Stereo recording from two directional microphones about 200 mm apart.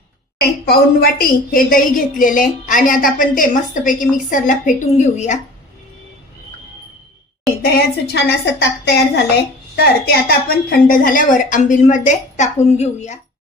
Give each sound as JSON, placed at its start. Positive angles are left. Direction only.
{"t": 0.6, "sound": "a woman's voice", "side_deg": 50}
{"t": 7.6, "sound": "a woman's voice", "side_deg": 55}